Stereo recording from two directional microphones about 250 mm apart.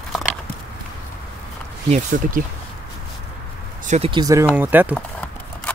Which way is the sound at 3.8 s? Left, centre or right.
Right.